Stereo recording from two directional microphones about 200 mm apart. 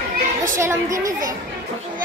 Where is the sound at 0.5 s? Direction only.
15° right (ahead or behind).